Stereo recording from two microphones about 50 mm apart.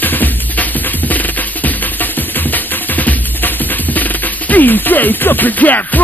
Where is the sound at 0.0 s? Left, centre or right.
Left.